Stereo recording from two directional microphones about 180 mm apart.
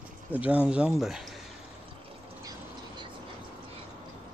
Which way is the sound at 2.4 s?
20° right (ahead or behind).